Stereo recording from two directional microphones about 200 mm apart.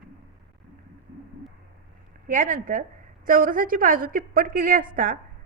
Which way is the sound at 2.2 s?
40° right (ahead or behind).